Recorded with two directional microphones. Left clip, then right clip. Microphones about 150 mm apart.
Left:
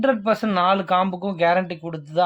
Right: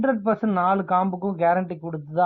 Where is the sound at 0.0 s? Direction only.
15° left (ahead or behind).